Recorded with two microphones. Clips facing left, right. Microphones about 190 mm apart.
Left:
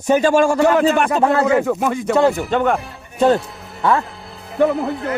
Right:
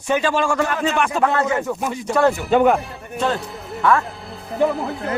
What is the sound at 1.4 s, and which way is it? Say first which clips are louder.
Speech: left 6 dB; 90° left.